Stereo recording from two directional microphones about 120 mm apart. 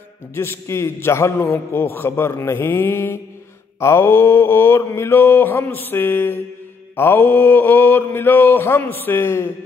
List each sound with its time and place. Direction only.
0.3 s a man's voice: 20° left (ahead or behind)
3.8 s mantra: 20° left (ahead or behind)